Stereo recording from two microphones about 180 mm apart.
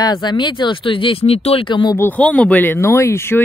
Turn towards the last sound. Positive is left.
turn(degrees=15)  # may be behind; listen again after turning